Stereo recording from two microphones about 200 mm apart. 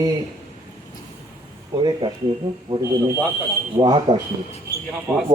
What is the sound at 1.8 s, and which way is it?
A man's voice, 20° right (ahead or behind).